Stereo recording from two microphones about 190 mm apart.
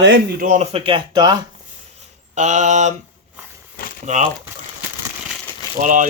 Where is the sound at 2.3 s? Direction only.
40° right (ahead or behind).